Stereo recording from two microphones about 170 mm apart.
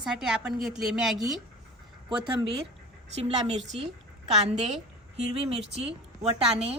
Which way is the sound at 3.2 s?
35° right (ahead or behind).